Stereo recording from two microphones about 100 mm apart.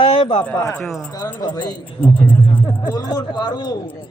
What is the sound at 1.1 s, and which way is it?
Speech, 45° left (ahead or behind).